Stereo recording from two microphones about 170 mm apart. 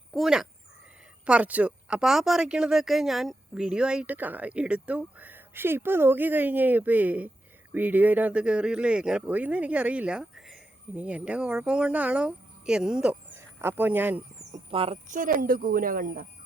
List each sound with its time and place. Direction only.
0.1 s speech: centre (ahead or behind)
14.5 s speech: 35° right (ahead or behind)
15.1 s a woman's voice: 55° right (ahead or behind)